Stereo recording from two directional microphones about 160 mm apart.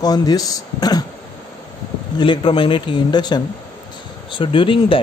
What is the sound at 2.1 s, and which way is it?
Speech, 30° left (ahead or behind).